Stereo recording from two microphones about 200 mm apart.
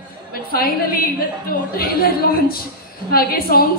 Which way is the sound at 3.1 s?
50° left (ahead or behind).